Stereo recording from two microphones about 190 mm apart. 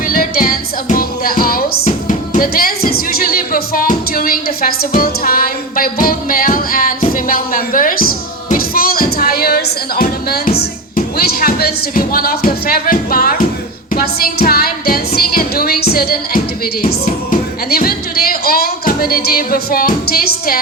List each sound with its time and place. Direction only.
0.1 s music: 50° left (ahead or behind)
1.8 s speech: 40° left (ahead or behind)
13.9 s music: 50° left (ahead or behind)
17.7 s speech: 50° left (ahead or behind)